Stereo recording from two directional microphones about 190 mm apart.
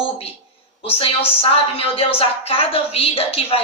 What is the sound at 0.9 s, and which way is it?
A woman's voice, 30° left (ahead or behind).